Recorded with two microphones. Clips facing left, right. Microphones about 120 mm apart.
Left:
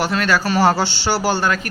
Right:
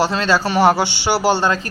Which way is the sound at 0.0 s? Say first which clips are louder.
Right 2 dB; 25° right (ahead or behind).